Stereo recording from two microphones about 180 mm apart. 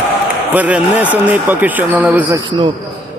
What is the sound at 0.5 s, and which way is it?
Speech, 10° right (ahead or behind).